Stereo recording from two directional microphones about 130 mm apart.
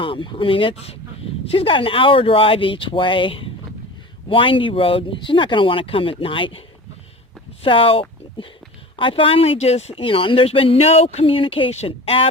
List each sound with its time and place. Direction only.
0.0 s speech: 40° left (ahead or behind)
7.6 s speech: 45° left (ahead or behind)